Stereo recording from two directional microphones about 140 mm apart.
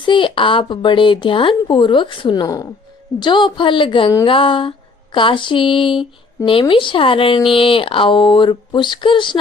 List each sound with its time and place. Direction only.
0.0 s speech: 35° left (ahead or behind)